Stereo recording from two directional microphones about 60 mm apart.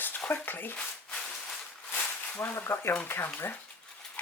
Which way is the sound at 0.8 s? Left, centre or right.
Centre.